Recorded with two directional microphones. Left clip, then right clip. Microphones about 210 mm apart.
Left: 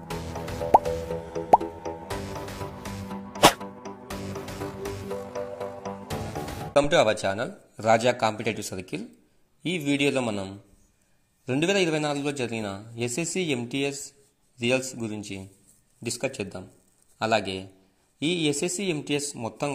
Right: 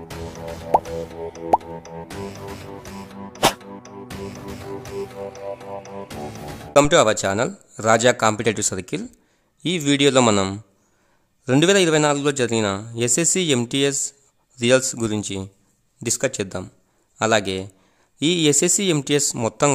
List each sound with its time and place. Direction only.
0.7 s plop: centre (ahead or behind)
3.4 s music: centre (ahead or behind)
6.7 s speech: 25° right (ahead or behind)
10.2 s a man's voice: 50° right (ahead or behind)
11.4 s speech: 30° right (ahead or behind)